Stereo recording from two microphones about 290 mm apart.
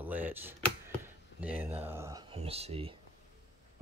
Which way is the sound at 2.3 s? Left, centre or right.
Centre.